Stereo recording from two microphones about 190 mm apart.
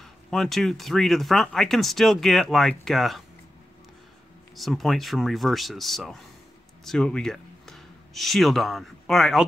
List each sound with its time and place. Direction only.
0.0 s speech: centre (ahead or behind)
4.6 s speech: centre (ahead or behind)